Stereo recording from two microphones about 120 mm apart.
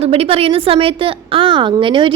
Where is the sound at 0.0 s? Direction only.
55° right (ahead or behind).